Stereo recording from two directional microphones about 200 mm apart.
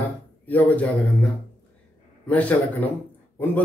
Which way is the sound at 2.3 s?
5° left (ahead or behind).